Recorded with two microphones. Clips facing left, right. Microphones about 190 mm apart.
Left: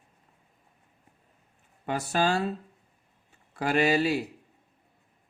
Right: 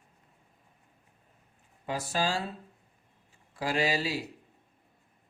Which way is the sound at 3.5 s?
55° left (ahead or behind).